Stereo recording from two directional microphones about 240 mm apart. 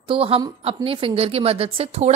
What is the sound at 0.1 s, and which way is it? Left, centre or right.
A woman's voice, right.